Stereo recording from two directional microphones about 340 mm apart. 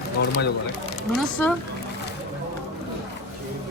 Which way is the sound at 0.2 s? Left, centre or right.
Left.